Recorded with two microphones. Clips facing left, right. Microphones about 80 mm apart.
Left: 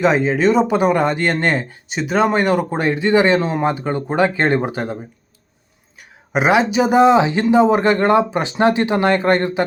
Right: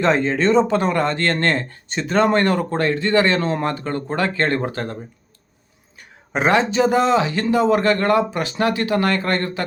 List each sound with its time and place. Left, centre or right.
0.0 s speech: centre
6.0 s speech: centre